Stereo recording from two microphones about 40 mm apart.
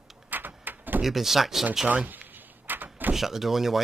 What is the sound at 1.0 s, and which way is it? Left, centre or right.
Speech, centre.